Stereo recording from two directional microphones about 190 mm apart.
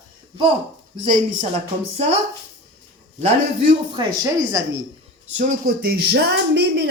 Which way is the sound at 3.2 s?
30° right (ahead or behind).